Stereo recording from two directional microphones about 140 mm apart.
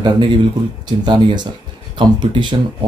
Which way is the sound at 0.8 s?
30° right (ahead or behind).